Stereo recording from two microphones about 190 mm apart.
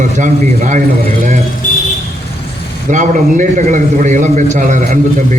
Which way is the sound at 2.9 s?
40° right (ahead or behind).